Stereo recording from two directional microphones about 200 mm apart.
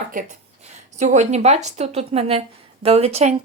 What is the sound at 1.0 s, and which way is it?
A woman's voice, 35° right (ahead or behind).